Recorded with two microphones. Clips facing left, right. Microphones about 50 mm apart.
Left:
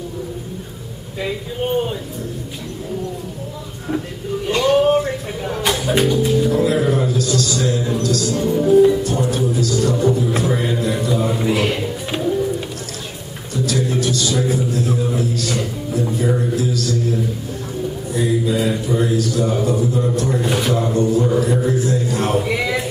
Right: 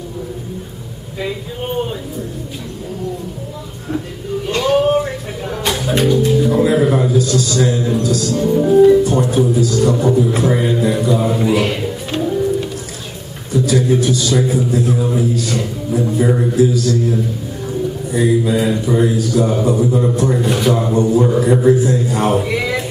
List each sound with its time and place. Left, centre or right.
4.5 s a sound: centre
5.6 s music: centre
6.6 s a sound: centre
7.4 s a man's voice: centre
13.5 s a man's voice: centre
18.1 s speech: centre
20.3 s a man's voice: centre
20.7 s a man's voice: centre